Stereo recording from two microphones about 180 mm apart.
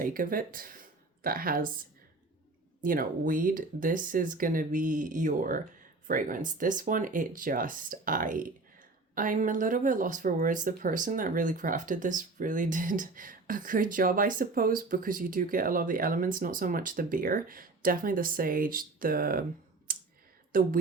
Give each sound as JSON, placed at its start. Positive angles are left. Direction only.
{"t": 0.0, "sound": "speech", "side_deg": -50}
{"t": 2.8, "sound": "speech", "side_deg": -50}
{"t": 19.9, "sound": "clicking", "side_deg": -50}
{"t": 20.5, "sound": "speech", "side_deg": -55}